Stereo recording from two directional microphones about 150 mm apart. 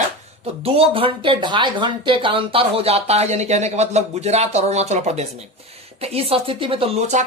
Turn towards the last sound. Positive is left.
turn(degrees=-45)  # may be behind; listen again after turning